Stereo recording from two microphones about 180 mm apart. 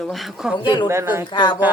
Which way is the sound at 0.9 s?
15° right (ahead or behind).